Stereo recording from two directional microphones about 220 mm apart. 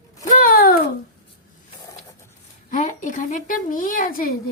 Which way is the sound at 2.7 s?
35° left (ahead or behind).